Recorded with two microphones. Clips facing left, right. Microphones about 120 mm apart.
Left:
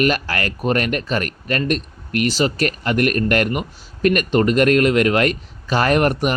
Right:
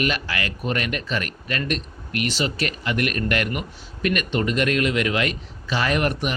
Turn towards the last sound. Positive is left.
turn(degrees=45)  # may be behind; listen again after turning